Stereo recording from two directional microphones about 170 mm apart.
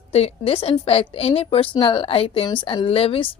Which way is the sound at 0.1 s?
35° left (ahead or behind).